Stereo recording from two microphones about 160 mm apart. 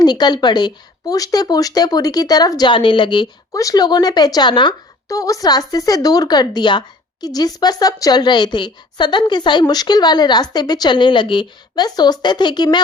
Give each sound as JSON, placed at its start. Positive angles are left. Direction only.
{"t": 0.0, "sound": "speech", "side_deg": 25}